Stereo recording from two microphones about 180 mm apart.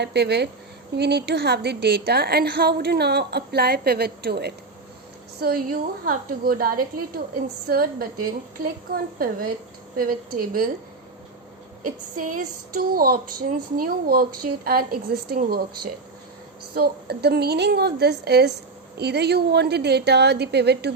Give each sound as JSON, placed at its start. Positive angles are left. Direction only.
{"t": 0.0, "sound": "a woman's voice", "side_deg": -70}
{"t": 9.1, "sound": "a woman's voice", "side_deg": -55}
{"t": 11.9, "sound": "a woman's voice", "side_deg": -50}